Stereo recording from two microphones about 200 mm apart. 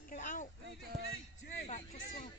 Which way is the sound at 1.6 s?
35° left (ahead or behind).